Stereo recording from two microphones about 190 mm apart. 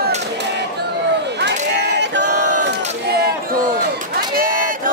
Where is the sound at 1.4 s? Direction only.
65° right (ahead or behind).